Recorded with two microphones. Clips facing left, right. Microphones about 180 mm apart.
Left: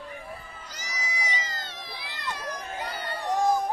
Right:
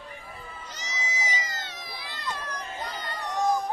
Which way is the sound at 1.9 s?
15° left (ahead or behind).